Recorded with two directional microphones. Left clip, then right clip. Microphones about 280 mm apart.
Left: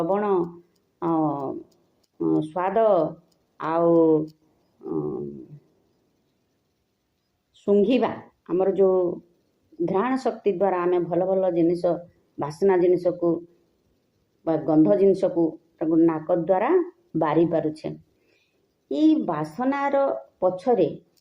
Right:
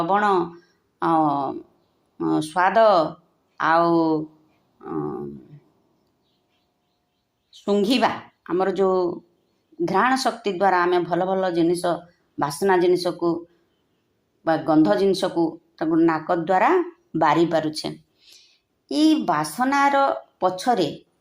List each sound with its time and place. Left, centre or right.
0.1 s speech: right
7.6 s speech: right
14.7 s speech: right